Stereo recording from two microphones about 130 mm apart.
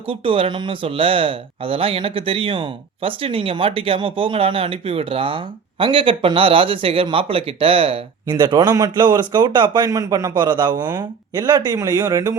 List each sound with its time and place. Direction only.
0.1 s speech: 45° right (ahead or behind)
8.3 s a man's voice: 35° right (ahead or behind)